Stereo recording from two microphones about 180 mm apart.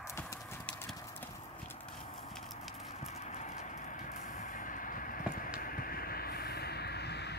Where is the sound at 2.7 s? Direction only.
40° left (ahead or behind).